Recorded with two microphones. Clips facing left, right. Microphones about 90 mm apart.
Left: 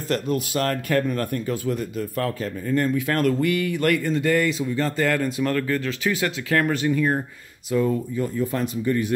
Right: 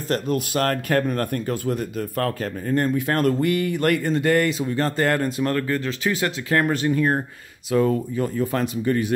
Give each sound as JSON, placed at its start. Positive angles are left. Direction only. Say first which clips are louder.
{"t": 0.1, "sound": "speech", "louder": "right 1 dB", "side_deg": -50}
{"t": 2.7, "sound": "speech", "louder": "right 1 dB", "side_deg": -35}
{"t": 7.7, "sound": "speech", "louder": "right 2 dB", "side_deg": -60}